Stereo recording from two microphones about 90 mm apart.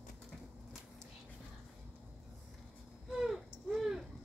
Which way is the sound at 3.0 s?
5° right (ahead or behind).